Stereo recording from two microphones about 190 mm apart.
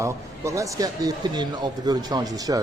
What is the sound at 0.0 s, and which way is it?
A man's voice, 15° right (ahead or behind).